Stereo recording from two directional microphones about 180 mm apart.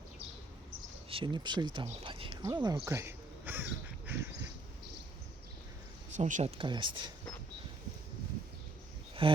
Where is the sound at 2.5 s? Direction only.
20° right (ahead or behind).